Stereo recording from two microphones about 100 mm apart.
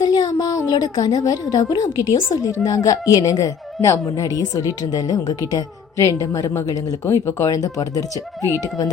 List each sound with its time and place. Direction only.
0.0 s a woman's voice: 45° left (ahead or behind)